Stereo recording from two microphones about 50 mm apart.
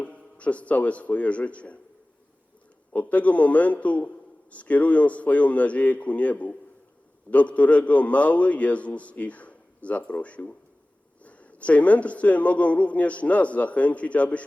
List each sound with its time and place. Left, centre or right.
0.0 s speech: left
2.9 s a man's voice: left